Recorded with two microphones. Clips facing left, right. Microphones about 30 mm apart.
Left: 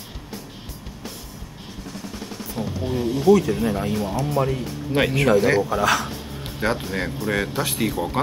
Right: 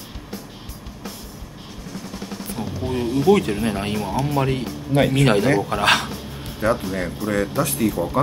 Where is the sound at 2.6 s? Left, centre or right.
Centre.